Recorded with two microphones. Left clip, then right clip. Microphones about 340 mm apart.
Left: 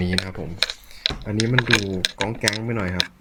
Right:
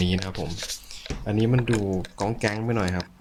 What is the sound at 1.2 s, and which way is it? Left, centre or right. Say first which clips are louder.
Speech: left 4 dB; centre.